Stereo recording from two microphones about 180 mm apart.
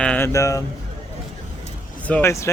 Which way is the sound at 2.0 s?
10° left (ahead or behind).